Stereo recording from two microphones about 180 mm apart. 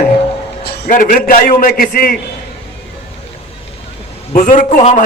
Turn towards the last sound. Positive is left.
turn(degrees=45)  # may be behind; listen again after turning